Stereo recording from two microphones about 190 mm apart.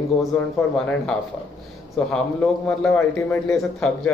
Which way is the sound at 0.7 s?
5° left (ahead or behind).